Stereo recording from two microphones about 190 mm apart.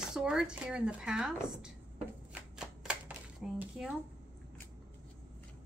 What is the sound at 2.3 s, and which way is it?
Shuffling cards, 5° right (ahead or behind).